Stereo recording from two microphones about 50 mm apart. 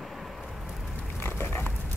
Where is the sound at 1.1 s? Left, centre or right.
Left.